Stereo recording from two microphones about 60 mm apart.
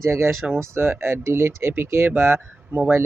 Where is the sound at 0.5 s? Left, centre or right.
Right.